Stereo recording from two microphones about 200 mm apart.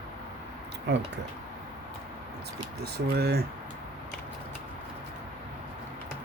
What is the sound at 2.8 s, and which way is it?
Speech, 55° right (ahead or behind).